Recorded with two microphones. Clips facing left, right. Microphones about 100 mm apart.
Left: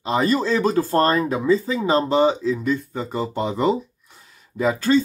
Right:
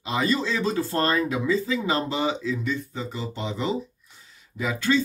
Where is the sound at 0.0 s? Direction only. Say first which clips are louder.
Left 5 dB; 40° left (ahead or behind).